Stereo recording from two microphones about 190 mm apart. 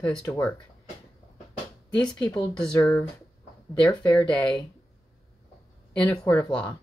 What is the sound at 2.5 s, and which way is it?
Speech, 5° left (ahead or behind).